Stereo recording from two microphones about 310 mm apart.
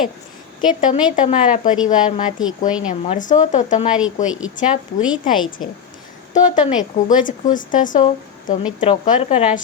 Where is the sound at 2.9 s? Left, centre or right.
Left.